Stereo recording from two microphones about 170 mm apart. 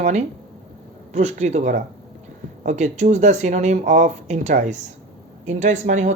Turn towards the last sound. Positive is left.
turn(degrees=-45)  # may be behind; listen again after turning